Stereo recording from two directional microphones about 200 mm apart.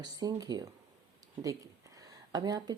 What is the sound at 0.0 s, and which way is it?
Speech, 20° right (ahead or behind).